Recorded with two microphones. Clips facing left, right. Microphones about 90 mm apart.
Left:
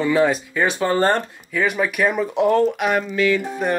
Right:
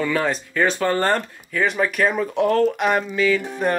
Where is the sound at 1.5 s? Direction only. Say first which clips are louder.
Even; 5° left (ahead or behind).